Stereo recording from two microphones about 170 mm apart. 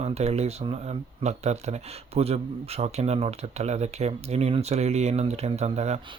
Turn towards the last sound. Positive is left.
turn(degrees=-40)  # may be behind; listen again after turning